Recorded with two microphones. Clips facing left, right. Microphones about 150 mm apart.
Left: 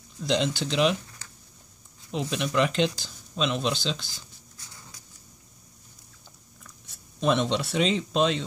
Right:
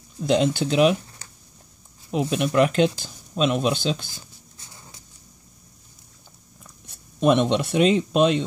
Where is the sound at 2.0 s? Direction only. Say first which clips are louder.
Right 6 dB; 55° right (ahead or behind).